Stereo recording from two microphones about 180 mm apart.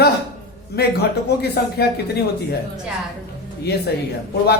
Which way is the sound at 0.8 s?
65° left (ahead or behind).